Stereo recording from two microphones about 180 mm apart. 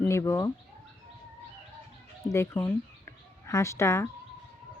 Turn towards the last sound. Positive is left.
turn(degrees=15)  # may be behind; listen again after turning